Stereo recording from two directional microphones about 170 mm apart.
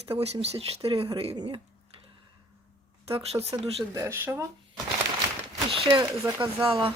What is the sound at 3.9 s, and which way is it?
Speech, 15° right (ahead or behind).